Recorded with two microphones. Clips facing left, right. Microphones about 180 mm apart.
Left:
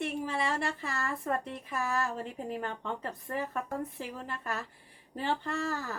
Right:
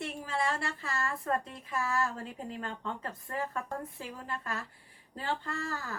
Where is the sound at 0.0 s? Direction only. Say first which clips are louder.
Left 2 dB; 15° left (ahead or behind).